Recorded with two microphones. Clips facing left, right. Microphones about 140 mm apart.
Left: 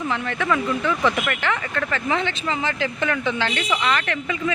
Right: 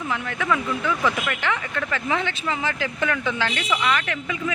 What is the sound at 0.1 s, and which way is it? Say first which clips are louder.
Speech: even; 5° right (ahead or behind).